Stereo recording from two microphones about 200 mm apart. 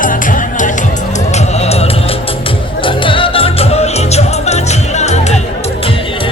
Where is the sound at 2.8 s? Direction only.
25° left (ahead or behind).